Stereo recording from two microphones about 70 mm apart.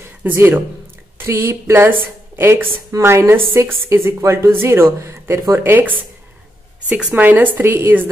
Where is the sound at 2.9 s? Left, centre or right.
Right.